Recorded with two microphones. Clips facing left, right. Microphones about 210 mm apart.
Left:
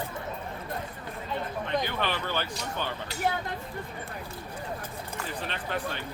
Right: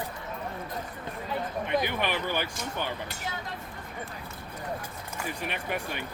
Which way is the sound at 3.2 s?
60° left (ahead or behind).